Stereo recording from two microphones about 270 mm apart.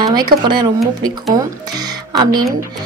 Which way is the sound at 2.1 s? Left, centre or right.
Centre.